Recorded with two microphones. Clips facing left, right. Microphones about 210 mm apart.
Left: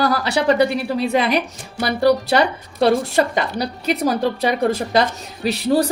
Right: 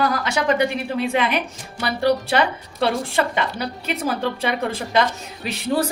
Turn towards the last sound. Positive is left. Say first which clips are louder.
# left 5 dB
turn(degrees=40)  # may be behind; listen again after turning